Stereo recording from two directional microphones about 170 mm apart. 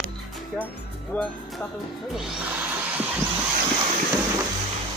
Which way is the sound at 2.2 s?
5° right (ahead or behind).